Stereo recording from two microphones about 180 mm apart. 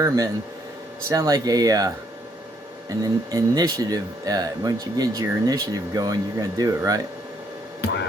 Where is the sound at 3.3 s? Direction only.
20° right (ahead or behind).